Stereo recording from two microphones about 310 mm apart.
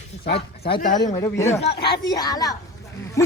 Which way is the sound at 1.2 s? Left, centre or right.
Centre.